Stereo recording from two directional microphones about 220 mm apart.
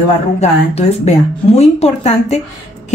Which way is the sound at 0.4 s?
30° left (ahead or behind).